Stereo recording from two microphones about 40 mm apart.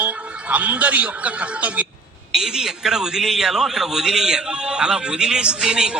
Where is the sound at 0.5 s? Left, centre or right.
Right.